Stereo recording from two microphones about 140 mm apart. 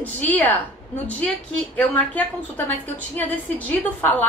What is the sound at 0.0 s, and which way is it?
A woman's voice, 10° left (ahead or behind).